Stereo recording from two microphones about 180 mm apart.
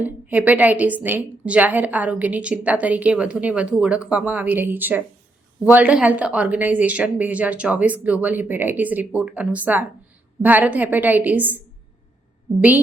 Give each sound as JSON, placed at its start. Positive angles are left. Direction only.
{"t": 0.0, "sound": "a woman's voice", "side_deg": -10}